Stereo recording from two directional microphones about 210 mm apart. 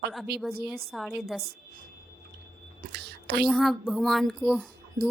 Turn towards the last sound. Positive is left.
turn(degrees=-5)  # may be behind; listen again after turning